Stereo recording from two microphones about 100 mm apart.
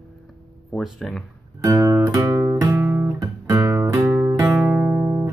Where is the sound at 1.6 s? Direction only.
30° right (ahead or behind).